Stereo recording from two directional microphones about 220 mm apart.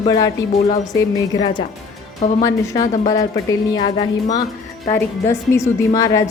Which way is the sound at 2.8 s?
35° left (ahead or behind).